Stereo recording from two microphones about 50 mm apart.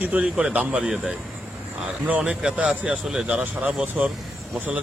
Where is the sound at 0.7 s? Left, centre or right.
Right.